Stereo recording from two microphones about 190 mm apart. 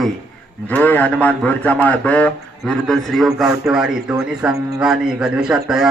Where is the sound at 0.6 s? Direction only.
10° left (ahead or behind).